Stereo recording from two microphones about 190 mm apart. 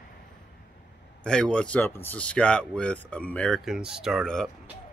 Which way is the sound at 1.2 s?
5° left (ahead or behind).